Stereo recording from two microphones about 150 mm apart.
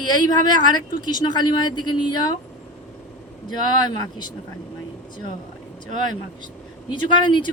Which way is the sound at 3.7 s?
30° left (ahead or behind).